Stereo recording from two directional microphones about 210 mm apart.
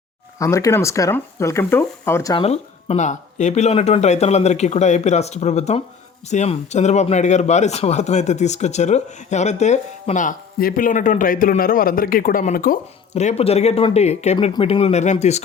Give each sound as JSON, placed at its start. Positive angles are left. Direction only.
{"t": 0.3, "sound": "speech", "side_deg": 15}
{"t": 2.3, "sound": "speech", "side_deg": 30}